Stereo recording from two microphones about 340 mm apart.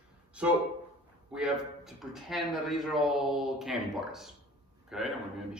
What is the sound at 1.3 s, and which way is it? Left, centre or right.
A man's voice, centre.